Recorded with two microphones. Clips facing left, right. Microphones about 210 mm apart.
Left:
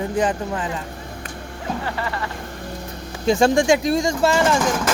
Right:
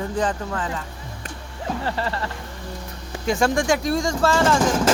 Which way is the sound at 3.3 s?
25° left (ahead or behind).